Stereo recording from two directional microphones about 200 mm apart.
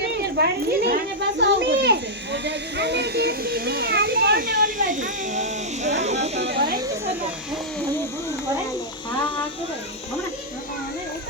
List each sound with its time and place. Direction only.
0.3 s a child's voice: 55° right (ahead or behind); by 6.3 s 35° right (ahead or behind)
6.5 s a child's voice: 50° right (ahead or behind)